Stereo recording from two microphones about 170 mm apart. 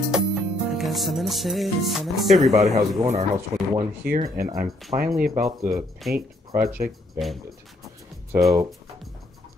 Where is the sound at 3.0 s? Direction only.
35° right (ahead or behind).